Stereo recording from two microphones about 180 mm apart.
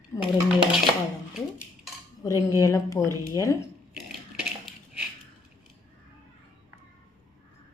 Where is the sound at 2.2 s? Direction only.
20° left (ahead or behind).